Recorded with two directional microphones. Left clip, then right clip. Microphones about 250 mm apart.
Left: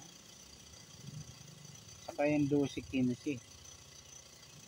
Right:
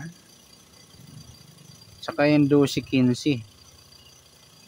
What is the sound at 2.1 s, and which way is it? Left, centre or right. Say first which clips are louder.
Speech: right 13 dB; right.